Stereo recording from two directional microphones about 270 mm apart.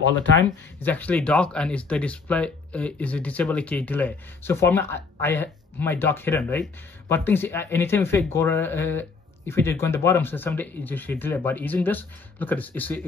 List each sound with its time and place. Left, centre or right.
0.2 s speech: left
0.8 s speech: centre